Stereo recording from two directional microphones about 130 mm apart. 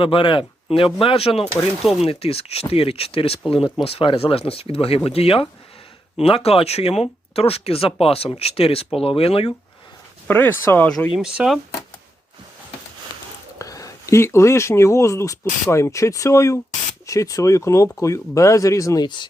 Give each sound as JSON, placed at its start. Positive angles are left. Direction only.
{"t": 0.0, "sound": "speech", "side_deg": 40}
{"t": 10.2, "sound": "speech", "side_deg": 15}
{"t": 11.1, "sound": "speech", "side_deg": -5}
{"t": 13.1, "sound": "a sound", "side_deg": 35}
{"t": 13.6, "sound": "speech", "side_deg": 25}